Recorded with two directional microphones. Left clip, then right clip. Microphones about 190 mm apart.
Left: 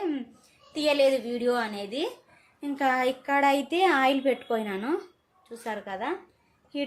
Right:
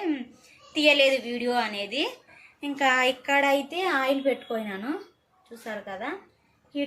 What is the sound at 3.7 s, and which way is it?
A woman's voice, 45° left (ahead or behind).